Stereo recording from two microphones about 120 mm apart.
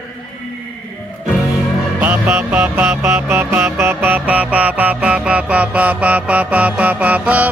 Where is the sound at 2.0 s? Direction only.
15° right (ahead or behind).